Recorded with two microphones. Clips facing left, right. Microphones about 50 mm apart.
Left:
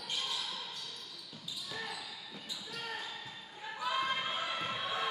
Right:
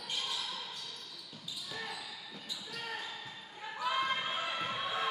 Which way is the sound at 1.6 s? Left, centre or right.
Centre.